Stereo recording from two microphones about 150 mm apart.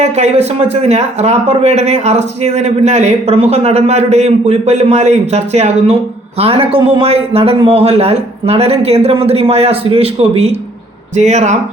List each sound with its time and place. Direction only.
0.0 s a man's voice: 50° right (ahead or behind)